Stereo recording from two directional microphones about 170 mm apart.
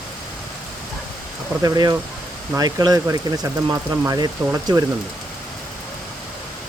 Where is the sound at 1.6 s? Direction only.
20° right (ahead or behind).